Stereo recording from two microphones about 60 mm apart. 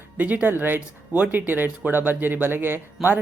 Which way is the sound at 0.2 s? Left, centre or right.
Right.